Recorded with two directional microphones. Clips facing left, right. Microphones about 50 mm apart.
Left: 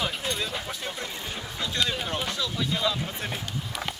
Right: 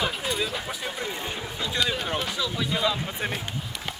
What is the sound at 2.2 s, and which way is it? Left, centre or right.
Speech, centre.